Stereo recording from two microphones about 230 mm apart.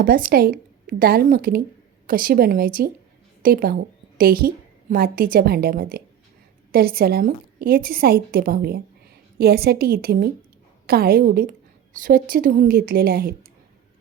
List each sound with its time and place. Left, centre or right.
0.0 s a woman's voice: right